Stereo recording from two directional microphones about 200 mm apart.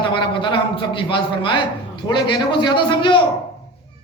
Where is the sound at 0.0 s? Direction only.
25° left (ahead or behind).